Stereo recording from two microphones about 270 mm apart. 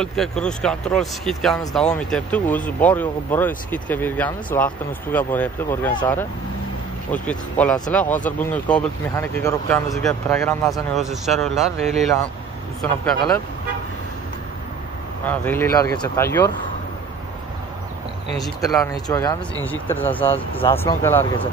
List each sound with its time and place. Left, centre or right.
0.0 s speech: centre
15.2 s speech: centre
18.4 s speech: centre
18.8 s speech: centre
20.2 s speech: centre
20.7 s speech: centre